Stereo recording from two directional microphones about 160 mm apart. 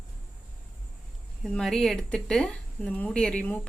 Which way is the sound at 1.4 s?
Centre (ahead or behind).